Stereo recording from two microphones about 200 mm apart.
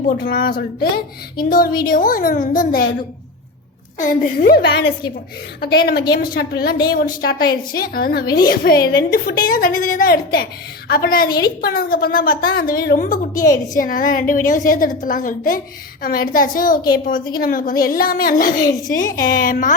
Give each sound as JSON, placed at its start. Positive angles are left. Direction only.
{"t": 0.2, "sound": "a woman's voice", "side_deg": 55}
{"t": 3.9, "sound": "a woman's voice", "side_deg": 40}